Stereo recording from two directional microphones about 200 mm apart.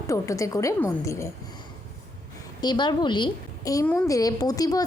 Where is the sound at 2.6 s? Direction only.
20° left (ahead or behind).